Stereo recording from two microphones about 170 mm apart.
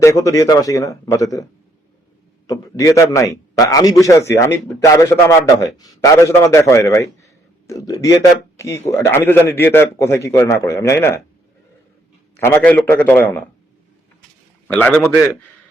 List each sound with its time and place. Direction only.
0.0 s a man's voice: 20° left (ahead or behind)
2.5 s a man's voice: 20° left (ahead or behind)
12.4 s a man's voice: 15° left (ahead or behind)
14.7 s a man's voice: 5° left (ahead or behind)